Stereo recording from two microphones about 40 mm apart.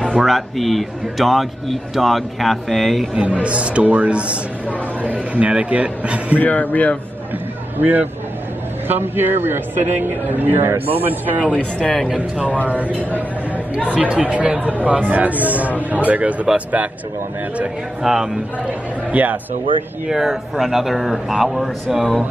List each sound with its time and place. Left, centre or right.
0.1 s a man's voice: centre
3.2 s speech: right
6.3 s speech: left
7.8 s speech: right
8.8 s a man's voice: right
11.4 s a woman's voice: left
12.6 s speech: right
13.8 s speech: right
18.0 s a man's voice: centre
19.1 s speech: right
20.1 s a man's voice: centre